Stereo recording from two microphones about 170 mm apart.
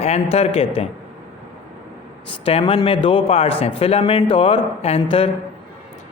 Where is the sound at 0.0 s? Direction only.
40° left (ahead or behind).